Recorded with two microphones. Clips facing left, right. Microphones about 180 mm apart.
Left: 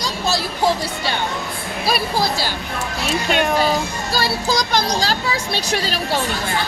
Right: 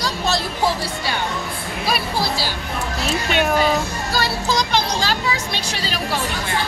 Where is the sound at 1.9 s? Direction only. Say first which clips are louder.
Left 2 dB; 45° left (ahead or behind).